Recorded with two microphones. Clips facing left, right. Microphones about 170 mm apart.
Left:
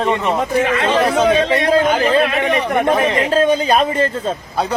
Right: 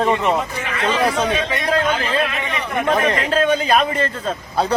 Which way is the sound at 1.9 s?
65° left (ahead or behind).